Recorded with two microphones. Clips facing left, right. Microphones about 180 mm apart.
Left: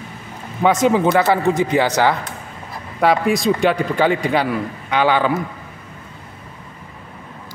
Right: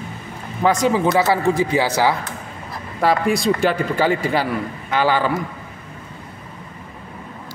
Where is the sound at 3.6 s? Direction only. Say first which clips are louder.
Left 2 dB; centre (ahead or behind).